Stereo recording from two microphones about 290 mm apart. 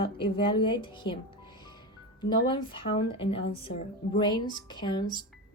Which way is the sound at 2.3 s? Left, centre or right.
Centre.